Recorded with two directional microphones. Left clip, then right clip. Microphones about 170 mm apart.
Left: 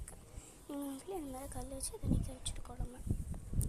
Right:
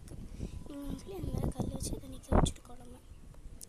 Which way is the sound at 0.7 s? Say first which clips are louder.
Left 2 dB; centre (ahead or behind).